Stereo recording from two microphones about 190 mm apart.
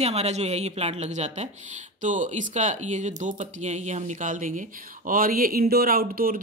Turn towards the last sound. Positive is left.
turn(degrees=-50)  # may be behind; listen again after turning